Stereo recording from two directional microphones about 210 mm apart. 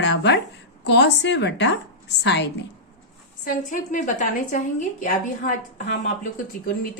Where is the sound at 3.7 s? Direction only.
35° left (ahead or behind).